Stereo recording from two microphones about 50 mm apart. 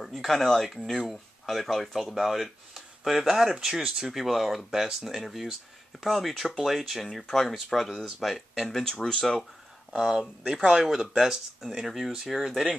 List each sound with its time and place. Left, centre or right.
0.0 s speech: centre
8.8 s speech: centre
10.4 s speech: centre